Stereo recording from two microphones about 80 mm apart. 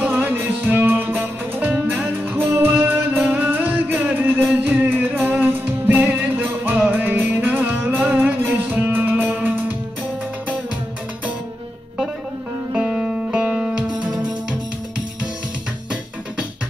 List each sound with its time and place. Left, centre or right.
0.0 s music: right
12.7 s music: centre